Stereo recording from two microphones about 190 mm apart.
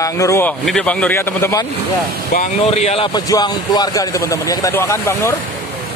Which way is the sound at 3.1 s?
20° left (ahead or behind).